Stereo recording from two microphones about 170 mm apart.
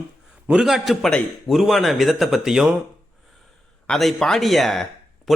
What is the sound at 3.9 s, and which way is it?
Speech, centre (ahead or behind).